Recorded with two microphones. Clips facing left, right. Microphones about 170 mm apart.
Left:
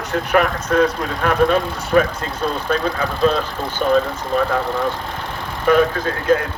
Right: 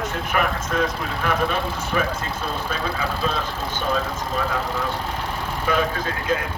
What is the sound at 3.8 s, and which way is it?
Speech, 50° left (ahead or behind).